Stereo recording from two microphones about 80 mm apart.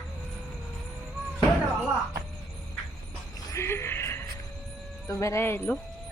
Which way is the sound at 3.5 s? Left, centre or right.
Left.